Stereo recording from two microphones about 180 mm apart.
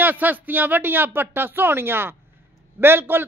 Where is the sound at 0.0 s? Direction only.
10° right (ahead or behind).